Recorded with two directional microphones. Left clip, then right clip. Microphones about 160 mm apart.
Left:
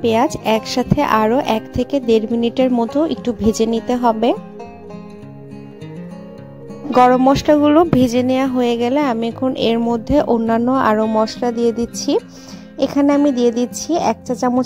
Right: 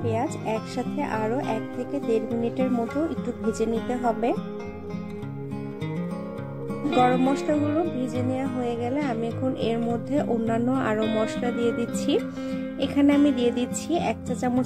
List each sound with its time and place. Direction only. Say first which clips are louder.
0.0 s speech: left 12 dB; 85° left; by 4.4 s 60° left (ahead or behind)
7.4 s a woman's voice: left 12 dB; 75° left (ahead or behind); by 14.1 s 40° left (ahead or behind)